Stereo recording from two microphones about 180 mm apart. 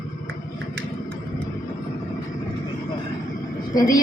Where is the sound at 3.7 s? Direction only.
20° left (ahead or behind).